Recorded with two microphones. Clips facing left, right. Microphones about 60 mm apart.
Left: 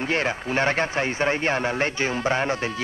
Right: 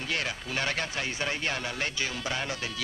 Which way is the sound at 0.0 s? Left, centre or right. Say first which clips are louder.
Left 8 dB; left.